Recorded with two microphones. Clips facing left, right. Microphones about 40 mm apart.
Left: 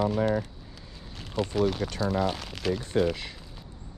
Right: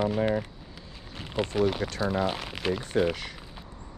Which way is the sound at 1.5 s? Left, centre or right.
Centre.